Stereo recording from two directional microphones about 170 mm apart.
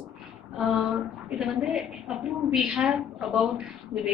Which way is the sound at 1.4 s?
5° right (ahead or behind).